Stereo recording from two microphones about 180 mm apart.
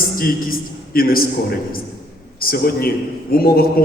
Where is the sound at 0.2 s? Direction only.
50° left (ahead or behind).